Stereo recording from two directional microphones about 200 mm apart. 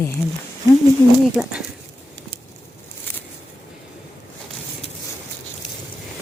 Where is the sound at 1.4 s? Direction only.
5° right (ahead or behind).